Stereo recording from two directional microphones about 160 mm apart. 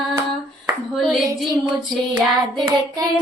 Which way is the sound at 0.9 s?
Centre (ahead or behind).